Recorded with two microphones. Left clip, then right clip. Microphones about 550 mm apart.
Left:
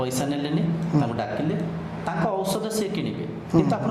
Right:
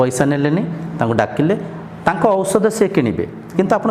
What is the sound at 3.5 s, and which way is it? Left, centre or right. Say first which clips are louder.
Speech: right 4 dB; left.